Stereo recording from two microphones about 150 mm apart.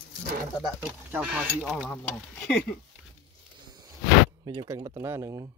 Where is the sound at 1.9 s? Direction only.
10° left (ahead or behind).